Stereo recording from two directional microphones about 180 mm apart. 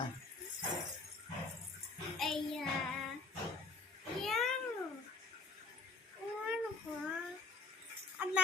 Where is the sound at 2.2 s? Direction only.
Centre (ahead or behind).